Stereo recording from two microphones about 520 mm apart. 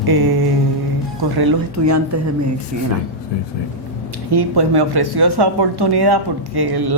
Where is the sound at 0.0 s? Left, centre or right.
Right.